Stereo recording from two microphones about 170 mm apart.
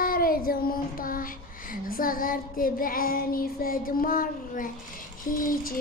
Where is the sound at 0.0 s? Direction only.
60° left (ahead or behind).